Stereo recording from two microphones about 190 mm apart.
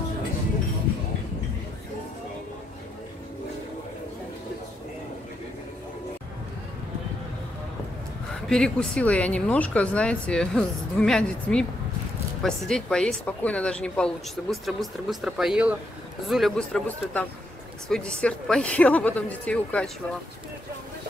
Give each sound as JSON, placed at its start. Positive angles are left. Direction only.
{"t": 8.5, "sound": "a woman's voice", "side_deg": 5}